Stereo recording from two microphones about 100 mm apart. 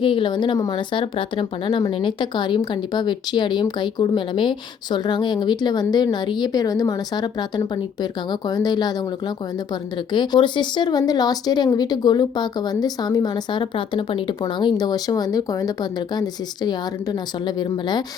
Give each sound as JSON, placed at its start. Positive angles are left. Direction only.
{"t": 0.0, "sound": "speech", "side_deg": 55}